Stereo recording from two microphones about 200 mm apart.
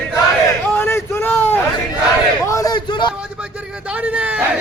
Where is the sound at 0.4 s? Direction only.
10° left (ahead or behind).